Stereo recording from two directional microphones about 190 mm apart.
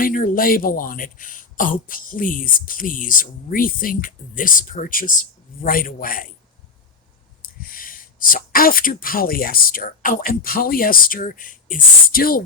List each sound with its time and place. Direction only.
0.0 s speech: 45° left (ahead or behind)
7.4 s speech: 50° left (ahead or behind)